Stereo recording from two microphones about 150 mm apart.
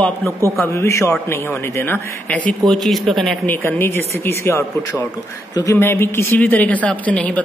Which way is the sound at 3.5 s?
15° left (ahead or behind).